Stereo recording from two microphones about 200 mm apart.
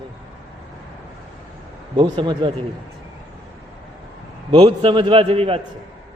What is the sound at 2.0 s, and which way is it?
Speech, 25° right (ahead or behind).